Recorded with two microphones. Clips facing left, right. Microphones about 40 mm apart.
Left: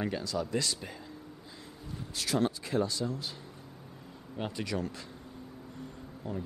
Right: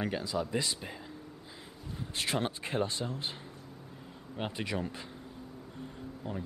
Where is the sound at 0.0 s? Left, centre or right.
Centre.